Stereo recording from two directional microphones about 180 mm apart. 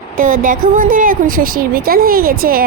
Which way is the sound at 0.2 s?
50° right (ahead or behind).